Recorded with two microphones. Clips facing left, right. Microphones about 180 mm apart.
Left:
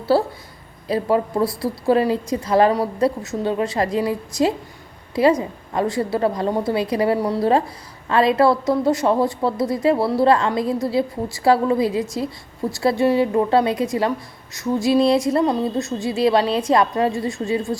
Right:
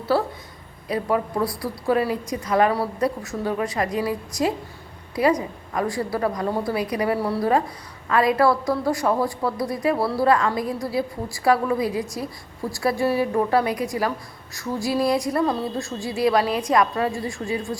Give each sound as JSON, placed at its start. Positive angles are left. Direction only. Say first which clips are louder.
{"t": 0.1, "sound": "a woman's voice", "louder": "left 4 dB", "side_deg": 30}